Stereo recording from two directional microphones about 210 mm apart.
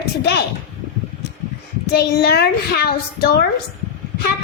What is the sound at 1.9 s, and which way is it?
A child's voice, 50° left (ahead or behind).